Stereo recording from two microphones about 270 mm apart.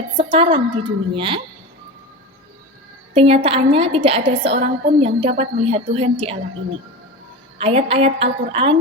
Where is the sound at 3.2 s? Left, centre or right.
Right.